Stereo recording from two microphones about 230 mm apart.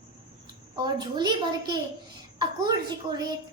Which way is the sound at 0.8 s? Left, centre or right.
Centre.